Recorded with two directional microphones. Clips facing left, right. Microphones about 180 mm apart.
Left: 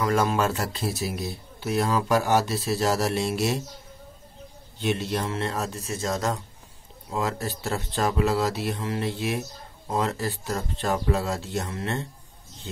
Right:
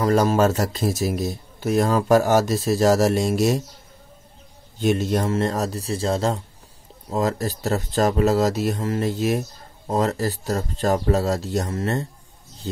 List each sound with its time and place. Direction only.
0.0 s speech: 35° right (ahead or behind)
4.7 s speech: 45° right (ahead or behind)
7.1 s speech: 40° right (ahead or behind)